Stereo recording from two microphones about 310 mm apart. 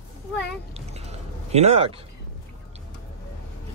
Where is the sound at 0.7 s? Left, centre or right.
Centre.